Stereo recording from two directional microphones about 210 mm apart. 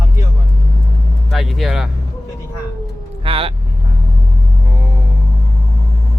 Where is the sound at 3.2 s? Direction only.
25° right (ahead or behind).